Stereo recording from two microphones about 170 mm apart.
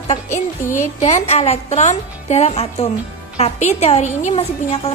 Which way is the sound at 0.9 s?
45° left (ahead or behind).